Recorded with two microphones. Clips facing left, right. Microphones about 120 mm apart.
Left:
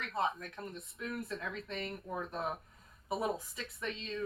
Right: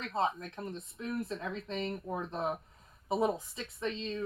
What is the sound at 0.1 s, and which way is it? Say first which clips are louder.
Speech: right 3 dB; 25° right (ahead or behind).